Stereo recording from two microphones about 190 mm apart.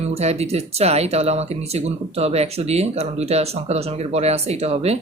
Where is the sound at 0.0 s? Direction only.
35° right (ahead or behind).